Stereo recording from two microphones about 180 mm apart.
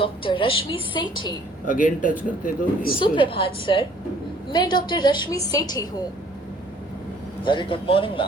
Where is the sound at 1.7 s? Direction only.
45° left (ahead or behind).